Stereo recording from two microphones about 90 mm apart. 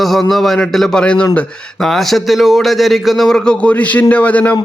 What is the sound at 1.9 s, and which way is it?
A man's voice, centre (ahead or behind).